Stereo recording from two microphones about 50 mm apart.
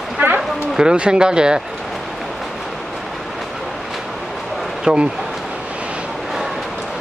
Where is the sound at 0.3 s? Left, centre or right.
Centre.